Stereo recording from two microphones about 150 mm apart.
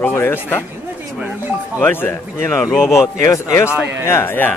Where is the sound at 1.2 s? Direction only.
10° right (ahead or behind).